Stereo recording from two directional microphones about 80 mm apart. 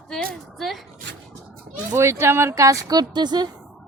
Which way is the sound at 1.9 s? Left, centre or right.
Right.